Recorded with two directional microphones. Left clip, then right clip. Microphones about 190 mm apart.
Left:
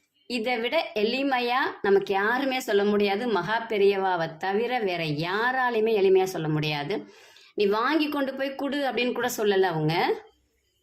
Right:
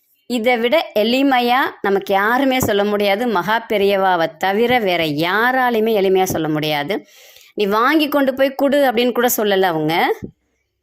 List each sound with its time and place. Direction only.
0.3 s a woman's voice: 40° right (ahead or behind)